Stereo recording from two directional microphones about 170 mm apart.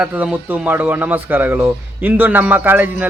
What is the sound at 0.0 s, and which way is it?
Speech, 10° right (ahead or behind).